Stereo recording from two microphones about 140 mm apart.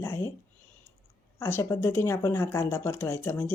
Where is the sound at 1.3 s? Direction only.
20° left (ahead or behind).